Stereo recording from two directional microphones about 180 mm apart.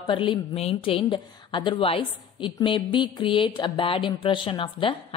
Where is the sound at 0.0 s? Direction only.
25° left (ahead or behind).